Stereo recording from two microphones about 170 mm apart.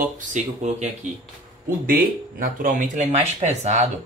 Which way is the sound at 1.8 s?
55° right (ahead or behind).